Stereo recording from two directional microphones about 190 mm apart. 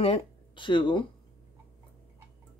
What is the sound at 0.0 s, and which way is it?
Speech, 30° left (ahead or behind).